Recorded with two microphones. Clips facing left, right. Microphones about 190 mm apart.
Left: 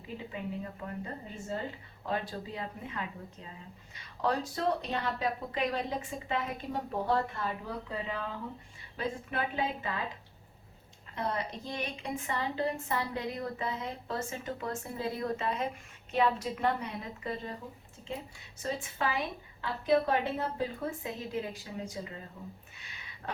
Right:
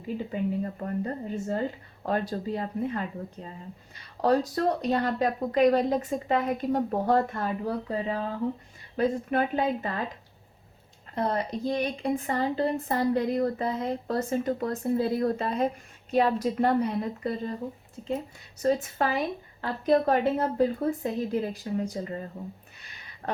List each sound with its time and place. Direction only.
0.3 s a woman's voice: 45° right (ahead or behind)
11.1 s a woman's voice: 35° right (ahead or behind)
18.6 s a woman's voice: 45° right (ahead or behind)